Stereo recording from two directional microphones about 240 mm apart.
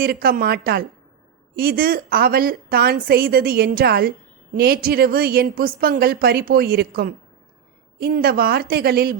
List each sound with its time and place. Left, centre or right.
0.0 s a woman's voice: right